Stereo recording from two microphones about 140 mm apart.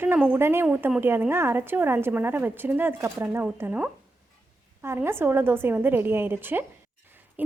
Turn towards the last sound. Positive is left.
turn(degrees=-15)  # may be behind; listen again after turning